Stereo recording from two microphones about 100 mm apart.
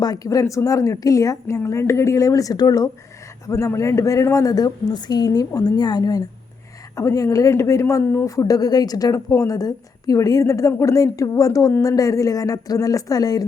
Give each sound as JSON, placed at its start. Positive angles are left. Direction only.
{"t": 0.0, "sound": "a woman's voice", "side_deg": 40}